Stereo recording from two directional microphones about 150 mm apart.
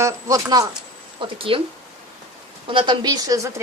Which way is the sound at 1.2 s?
35° right (ahead or behind).